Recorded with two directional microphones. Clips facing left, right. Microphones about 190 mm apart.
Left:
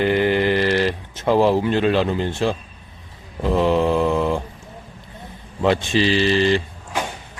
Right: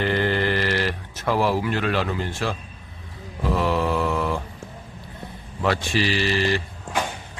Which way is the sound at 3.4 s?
20° left (ahead or behind).